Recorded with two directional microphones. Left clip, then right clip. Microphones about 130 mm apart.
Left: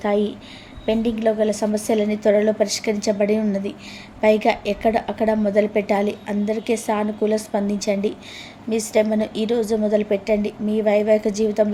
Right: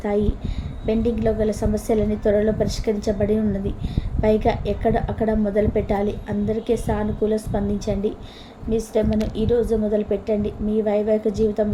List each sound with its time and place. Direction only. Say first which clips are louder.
0.0 s a woman's voice: left 2 dB; 20° left (ahead or behind)